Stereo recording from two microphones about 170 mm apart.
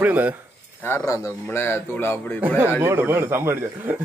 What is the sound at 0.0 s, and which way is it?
Speech, 10° right (ahead or behind).